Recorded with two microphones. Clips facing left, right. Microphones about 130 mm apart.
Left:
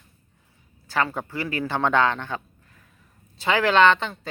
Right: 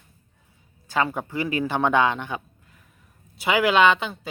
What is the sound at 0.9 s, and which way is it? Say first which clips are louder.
A man's voice: right 1 dB; 15° right (ahead or behind).